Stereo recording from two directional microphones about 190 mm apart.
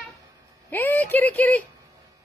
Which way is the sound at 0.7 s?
10° left (ahead or behind).